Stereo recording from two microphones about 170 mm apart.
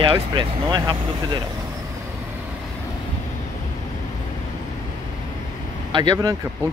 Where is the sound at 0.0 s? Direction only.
30° right (ahead or behind).